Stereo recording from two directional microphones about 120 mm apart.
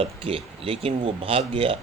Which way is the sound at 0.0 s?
50° right (ahead or behind).